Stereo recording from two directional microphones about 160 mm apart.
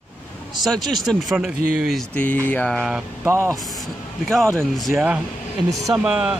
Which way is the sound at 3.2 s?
15° right (ahead or behind).